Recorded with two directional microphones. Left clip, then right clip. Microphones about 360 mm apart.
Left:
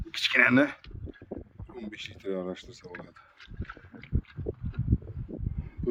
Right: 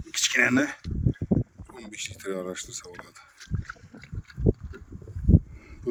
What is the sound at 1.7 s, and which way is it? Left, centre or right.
Speech, centre.